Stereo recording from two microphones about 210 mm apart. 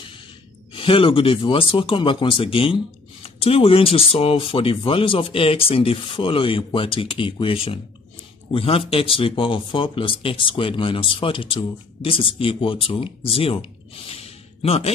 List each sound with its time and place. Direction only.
0.7 s speech: 25° left (ahead or behind)